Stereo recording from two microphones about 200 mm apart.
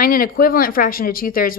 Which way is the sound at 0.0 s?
45° left (ahead or behind).